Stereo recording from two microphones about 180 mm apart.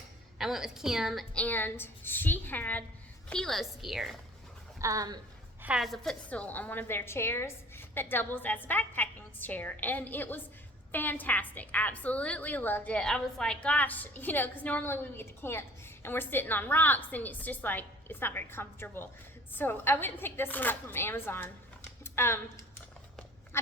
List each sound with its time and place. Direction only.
0.3 s a woman's voice: centre (ahead or behind)
4.8 s a woman's voice: 20° right (ahead or behind)
5.6 s a woman's voice: centre (ahead or behind); by 22.6 s 15° left (ahead or behind)